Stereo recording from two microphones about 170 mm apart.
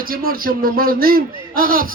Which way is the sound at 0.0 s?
60° right (ahead or behind).